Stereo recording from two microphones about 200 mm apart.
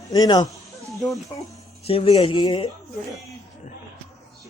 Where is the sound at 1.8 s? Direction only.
30° left (ahead or behind).